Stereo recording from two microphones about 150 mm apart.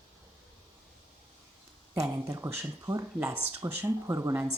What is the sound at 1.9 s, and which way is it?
Speech, 20° right (ahead or behind).